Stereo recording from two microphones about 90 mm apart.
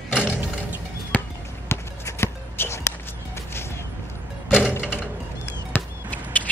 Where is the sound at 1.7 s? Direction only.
30° left (ahead or behind).